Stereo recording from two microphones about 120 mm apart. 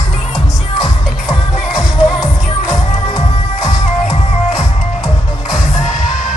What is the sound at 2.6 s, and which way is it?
Music, 25° left (ahead or behind).